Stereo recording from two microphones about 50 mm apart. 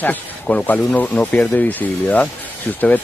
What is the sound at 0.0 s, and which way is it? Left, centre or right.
Speech, left.